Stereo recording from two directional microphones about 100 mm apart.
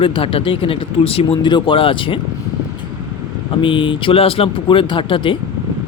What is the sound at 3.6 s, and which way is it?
Speech, 55° left (ahead or behind).